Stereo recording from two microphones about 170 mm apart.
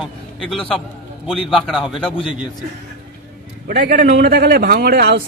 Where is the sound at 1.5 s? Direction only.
Centre (ahead or behind).